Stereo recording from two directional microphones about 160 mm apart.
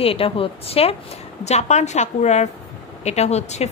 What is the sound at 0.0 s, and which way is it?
A woman's voice, 35° left (ahead or behind).